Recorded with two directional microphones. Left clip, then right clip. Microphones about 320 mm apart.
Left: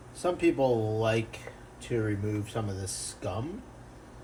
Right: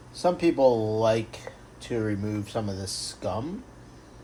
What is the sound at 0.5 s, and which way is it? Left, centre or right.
Speech, right.